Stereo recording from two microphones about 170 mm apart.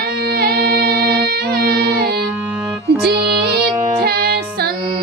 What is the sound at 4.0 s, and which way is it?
Music, 65° right (ahead or behind).